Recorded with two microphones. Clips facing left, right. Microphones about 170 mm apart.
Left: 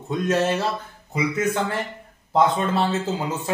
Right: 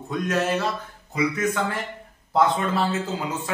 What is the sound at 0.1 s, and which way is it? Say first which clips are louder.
Speech: left 2 dB; 30° left (ahead or behind).